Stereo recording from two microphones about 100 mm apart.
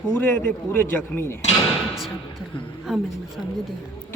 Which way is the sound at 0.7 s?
20° left (ahead or behind).